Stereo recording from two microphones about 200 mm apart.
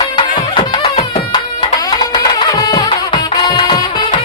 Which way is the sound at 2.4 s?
20° left (ahead or behind).